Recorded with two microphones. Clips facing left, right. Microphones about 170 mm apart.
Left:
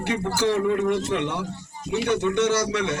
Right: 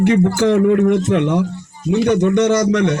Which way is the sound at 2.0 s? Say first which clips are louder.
Right 7 dB; 70° right (ahead or behind).